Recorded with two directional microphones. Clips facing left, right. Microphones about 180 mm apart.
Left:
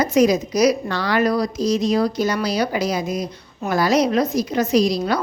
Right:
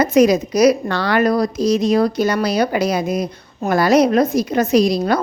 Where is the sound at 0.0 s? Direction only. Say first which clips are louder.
Right 3 dB; 65° right (ahead or behind).